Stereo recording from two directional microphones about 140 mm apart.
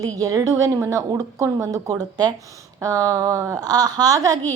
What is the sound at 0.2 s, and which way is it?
Speech, 25° right (ahead or behind).